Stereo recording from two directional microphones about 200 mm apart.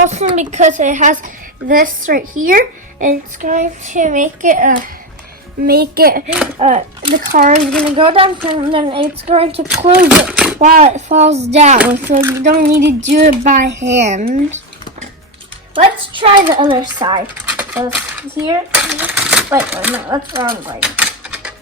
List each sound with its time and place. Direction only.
0.0 s a child's voice: 35° right (ahead or behind)
5.6 s a child's voice: 50° right (ahead or behind)
6.6 s a child's voice: 35° right (ahead or behind)
7.6 s a child's voice: 5° left (ahead or behind)
7.9 s a child's voice: 25° right (ahead or behind)
10.1 s speech: 5° right (ahead or behind)
10.6 s a child's voice: 40° right (ahead or behind)
11.8 s speech: 10° right (ahead or behind)
12.4 s a child's voice: 45° right (ahead or behind)
15.7 s speech: 25° right (ahead or behind)
17.5 s typewriter: 10° right (ahead or behind)
18.4 s speech: 15° right (ahead or behind)
20.8 s a sound: 5° right (ahead or behind)